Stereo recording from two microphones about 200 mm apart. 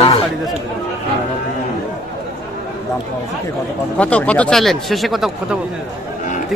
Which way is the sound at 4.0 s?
5° left (ahead or behind).